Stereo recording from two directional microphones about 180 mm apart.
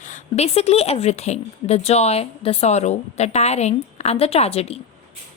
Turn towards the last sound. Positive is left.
turn(degrees=35)  # may be behind; listen again after turning